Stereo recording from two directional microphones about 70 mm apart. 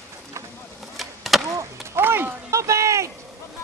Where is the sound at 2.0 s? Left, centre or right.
Right.